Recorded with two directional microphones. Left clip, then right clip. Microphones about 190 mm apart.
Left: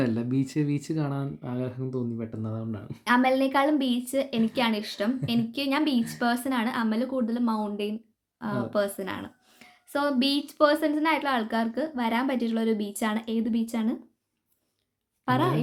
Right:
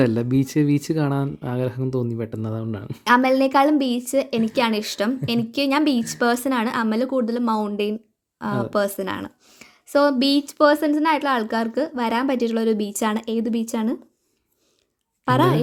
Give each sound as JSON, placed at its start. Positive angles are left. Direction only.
{"t": 0.0, "sound": "speech", "side_deg": -45}
{"t": 15.2, "sound": "a woman's voice", "side_deg": -45}